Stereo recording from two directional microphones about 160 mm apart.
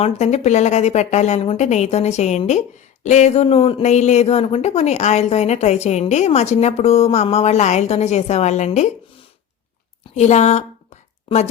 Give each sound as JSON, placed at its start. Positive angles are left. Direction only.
{"t": 0.0, "sound": "a woman's voice", "side_deg": 45}
{"t": 10.2, "sound": "a woman's voice", "side_deg": 45}